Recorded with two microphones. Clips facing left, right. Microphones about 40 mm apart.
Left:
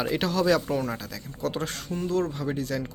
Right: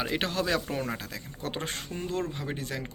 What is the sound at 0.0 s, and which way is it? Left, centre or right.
Speech, right.